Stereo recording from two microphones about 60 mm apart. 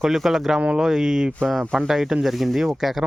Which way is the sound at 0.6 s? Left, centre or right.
Centre.